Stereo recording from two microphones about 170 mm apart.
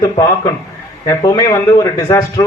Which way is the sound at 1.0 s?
20° left (ahead or behind).